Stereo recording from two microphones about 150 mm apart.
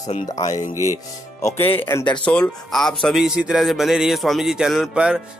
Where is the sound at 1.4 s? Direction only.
20° left (ahead or behind); by 5.2 s 5° right (ahead or behind).